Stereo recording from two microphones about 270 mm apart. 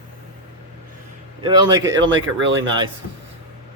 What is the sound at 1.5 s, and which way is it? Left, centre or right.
Speech, centre.